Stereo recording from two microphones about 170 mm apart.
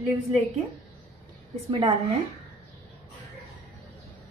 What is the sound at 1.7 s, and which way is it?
Speech, 35° right (ahead or behind).